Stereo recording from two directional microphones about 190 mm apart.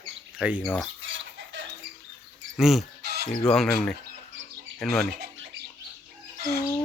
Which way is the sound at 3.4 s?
Centre (ahead or behind).